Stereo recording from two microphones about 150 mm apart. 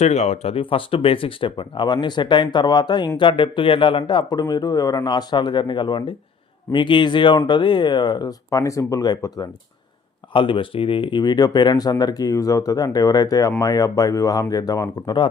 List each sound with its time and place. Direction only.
0.0 s speech: 45° left (ahead or behind); by 15.3 s 25° left (ahead or behind)